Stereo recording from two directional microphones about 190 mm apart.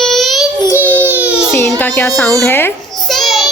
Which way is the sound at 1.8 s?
10° left (ahead or behind).